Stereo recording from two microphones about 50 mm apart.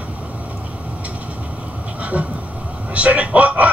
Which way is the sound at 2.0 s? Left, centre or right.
Right.